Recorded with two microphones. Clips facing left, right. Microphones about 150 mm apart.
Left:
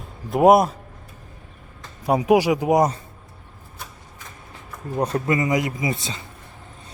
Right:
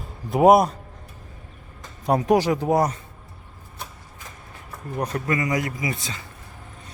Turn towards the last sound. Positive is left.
turn(degrees=25)  # may be behind; listen again after turning